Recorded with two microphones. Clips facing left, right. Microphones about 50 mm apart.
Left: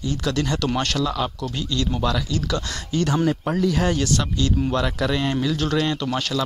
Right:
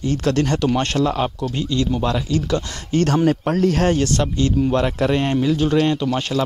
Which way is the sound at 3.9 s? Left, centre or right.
Right.